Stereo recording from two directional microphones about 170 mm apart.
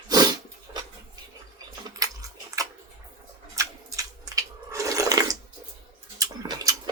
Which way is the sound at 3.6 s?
20° right (ahead or behind).